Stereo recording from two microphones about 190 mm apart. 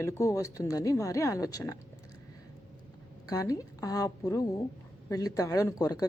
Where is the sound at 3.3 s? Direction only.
20° left (ahead or behind).